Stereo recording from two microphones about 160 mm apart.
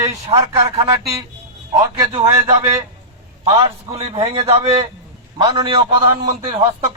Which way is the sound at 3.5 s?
35° right (ahead or behind).